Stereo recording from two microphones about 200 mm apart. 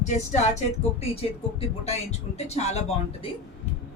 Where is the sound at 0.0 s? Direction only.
35° left (ahead or behind).